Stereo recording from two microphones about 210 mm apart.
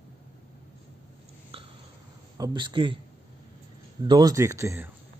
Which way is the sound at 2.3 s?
20° right (ahead or behind).